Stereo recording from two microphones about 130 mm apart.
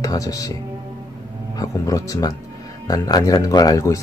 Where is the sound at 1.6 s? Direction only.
25° left (ahead or behind).